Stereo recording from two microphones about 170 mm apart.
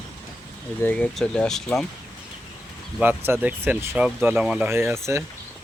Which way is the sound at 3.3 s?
10° right (ahead or behind).